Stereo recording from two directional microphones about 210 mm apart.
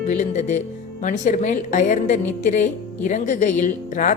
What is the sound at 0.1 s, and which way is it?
A woman's voice, 35° left (ahead or behind).